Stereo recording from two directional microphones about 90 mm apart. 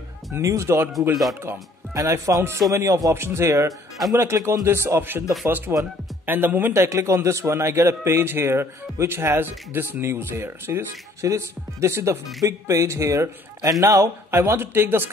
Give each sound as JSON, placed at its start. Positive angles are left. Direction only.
{"t": 0.3, "sound": "speech", "side_deg": -35}